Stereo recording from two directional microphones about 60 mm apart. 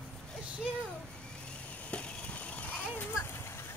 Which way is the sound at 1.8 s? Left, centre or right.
Centre.